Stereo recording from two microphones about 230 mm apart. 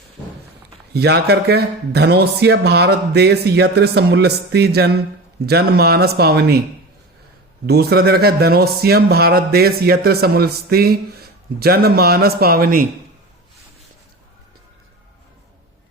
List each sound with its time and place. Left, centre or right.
0.9 s a man's voice: right
7.7 s a man's voice: right